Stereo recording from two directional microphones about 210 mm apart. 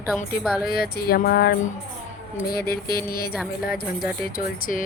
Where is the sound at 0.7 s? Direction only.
45° left (ahead or behind).